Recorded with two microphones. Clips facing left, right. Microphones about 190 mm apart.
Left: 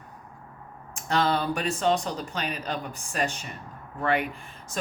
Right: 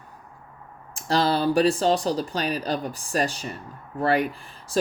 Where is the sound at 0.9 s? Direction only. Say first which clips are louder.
Right 3 dB; 35° right (ahead or behind).